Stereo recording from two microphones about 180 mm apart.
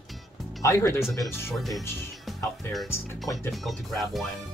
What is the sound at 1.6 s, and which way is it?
Speech, centre (ahead or behind).